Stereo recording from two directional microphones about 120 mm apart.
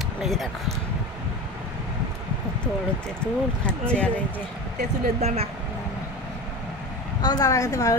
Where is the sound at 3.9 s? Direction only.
10° left (ahead or behind).